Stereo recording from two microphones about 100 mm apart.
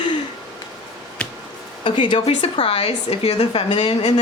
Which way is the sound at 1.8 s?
50° left (ahead or behind).